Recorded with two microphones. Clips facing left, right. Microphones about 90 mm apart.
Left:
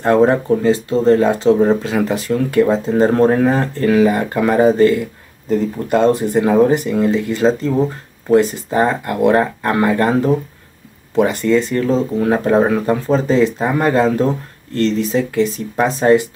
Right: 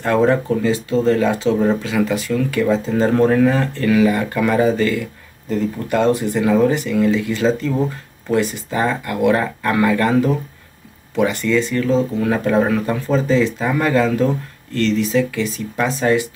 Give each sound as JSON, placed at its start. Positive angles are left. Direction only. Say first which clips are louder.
{"t": 0.0, "sound": "speech", "louder": "left 3 dB", "side_deg": 35}